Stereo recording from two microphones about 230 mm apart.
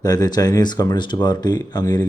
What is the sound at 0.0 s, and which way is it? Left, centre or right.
Speech, centre.